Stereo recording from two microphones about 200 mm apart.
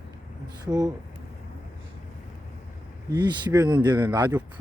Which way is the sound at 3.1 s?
20° right (ahead or behind).